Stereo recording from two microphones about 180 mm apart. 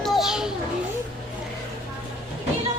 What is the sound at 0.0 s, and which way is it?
Children playing, centre (ahead or behind).